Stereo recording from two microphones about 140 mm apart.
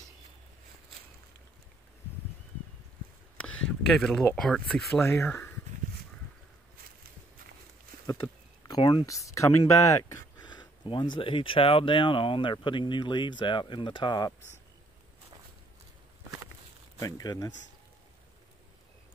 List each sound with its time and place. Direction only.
3.3 s speech: 5° left (ahead or behind)
5.0 s speech: 20° left (ahead or behind)
8.1 s speech: 25° left (ahead or behind)
10.5 s speech: 35° left (ahead or behind)
17.0 s speech: 25° left (ahead or behind)